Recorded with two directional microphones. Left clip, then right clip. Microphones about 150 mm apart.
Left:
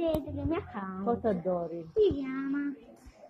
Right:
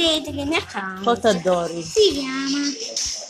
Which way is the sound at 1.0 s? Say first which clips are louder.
Right 12 dB; 30° right (ahead or behind).